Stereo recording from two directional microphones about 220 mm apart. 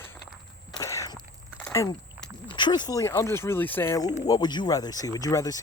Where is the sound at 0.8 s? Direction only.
15° left (ahead or behind).